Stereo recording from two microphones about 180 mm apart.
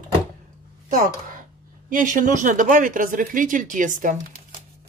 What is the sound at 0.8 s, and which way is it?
Speech, 50° right (ahead or behind).